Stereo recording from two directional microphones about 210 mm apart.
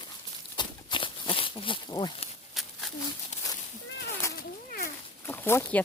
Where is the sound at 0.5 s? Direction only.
25° left (ahead or behind).